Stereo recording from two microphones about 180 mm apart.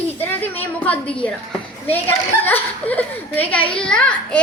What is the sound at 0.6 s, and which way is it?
A woman's voice, 10° left (ahead or behind).